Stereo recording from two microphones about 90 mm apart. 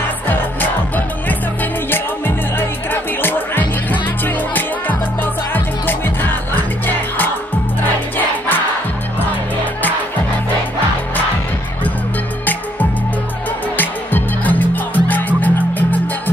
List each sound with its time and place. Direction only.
0.3 s music: 20° left (ahead or behind)
13.7 s music: 20° left (ahead or behind)